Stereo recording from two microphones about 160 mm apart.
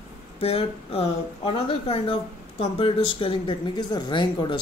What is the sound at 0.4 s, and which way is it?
Speech, 40° left (ahead or behind).